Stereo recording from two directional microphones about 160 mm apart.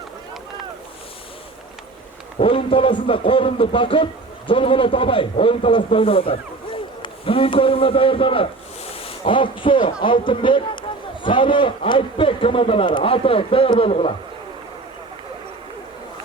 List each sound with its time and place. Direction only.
2.4 s a man's voice: 35° left (ahead or behind)